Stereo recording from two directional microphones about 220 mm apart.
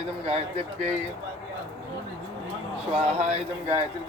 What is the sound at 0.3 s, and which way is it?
Speech, 25° right (ahead or behind).